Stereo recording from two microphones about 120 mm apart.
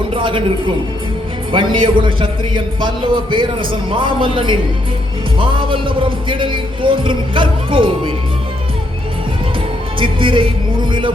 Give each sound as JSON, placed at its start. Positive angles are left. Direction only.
{"t": 0.1, "sound": "a sound", "side_deg": -45}
{"t": 1.5, "sound": "a man's voice", "side_deg": -45}
{"t": 10.0, "sound": "speech", "side_deg": -45}